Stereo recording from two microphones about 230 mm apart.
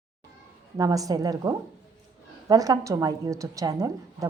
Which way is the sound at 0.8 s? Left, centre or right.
Centre.